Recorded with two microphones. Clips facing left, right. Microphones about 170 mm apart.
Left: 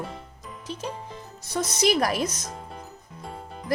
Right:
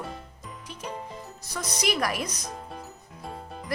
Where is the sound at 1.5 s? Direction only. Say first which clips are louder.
Left 6 dB; 30° left (ahead or behind).